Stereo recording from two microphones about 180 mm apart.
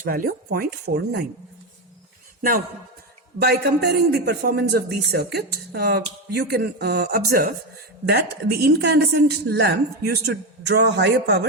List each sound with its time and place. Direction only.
0.1 s a man's voice: 55° right (ahead or behind)
3.3 s a man's voice: 60° right (ahead or behind)